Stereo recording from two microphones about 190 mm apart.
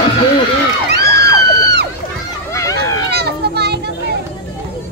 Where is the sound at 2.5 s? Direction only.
15° left (ahead or behind).